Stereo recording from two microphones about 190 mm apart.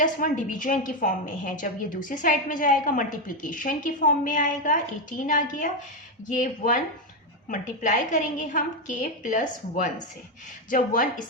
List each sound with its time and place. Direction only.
0.0 s a woman's voice: 45° left (ahead or behind)